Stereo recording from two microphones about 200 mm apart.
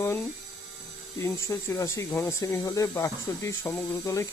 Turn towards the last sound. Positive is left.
turn(degrees=15)  # may be behind; listen again after turning